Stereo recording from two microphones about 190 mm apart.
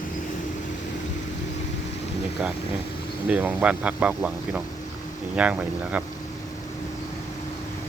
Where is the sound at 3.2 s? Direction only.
5° right (ahead or behind).